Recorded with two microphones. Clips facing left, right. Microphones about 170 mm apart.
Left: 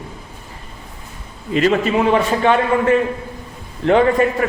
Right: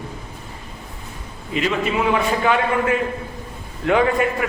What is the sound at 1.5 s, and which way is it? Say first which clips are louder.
A man's voice: left 5 dB; 40° left (ahead or behind).